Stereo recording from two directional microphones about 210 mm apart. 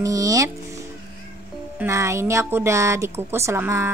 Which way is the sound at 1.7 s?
15° right (ahead or behind).